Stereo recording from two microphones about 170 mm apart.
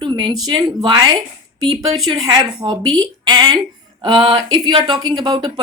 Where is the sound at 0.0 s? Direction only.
30° right (ahead or behind).